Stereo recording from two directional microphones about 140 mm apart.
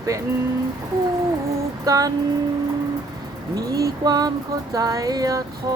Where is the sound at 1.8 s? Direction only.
25° right (ahead or behind).